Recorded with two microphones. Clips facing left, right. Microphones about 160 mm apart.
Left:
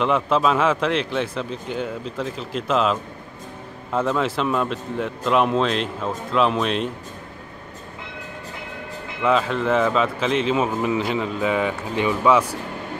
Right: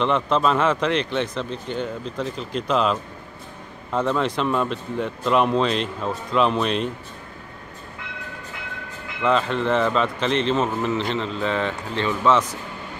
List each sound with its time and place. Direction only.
0.0 s speech: 5° left (ahead or behind)
9.2 s a man's voice: 5° left (ahead or behind)